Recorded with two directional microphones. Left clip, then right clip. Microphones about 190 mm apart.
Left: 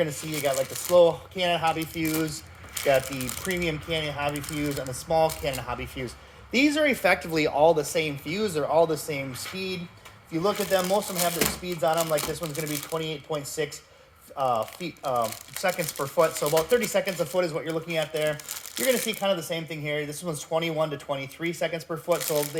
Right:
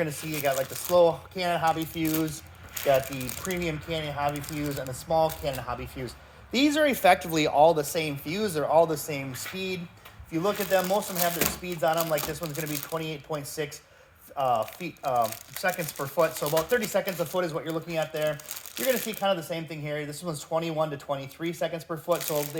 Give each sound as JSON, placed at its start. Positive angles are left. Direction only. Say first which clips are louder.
{"t": 0.3, "sound": "speech", "louder": "left 1 dB", "side_deg": 0}
{"t": 0.9, "sound": "speech", "louder": "left 2 dB", "side_deg": -15}
{"t": 3.5, "sound": "speech", "louder": "left 3 dB", "side_deg": -5}
{"t": 4.3, "sound": "speech", "louder": "left 2 dB", "side_deg": 10}
{"t": 6.5, "sound": "speech", "louder": "left 1 dB", "side_deg": -20}
{"t": 10.6, "sound": "speech", "louder": "even", "side_deg": 0}
{"t": 18.8, "sound": "speech", "louder": "left 2 dB", "side_deg": 5}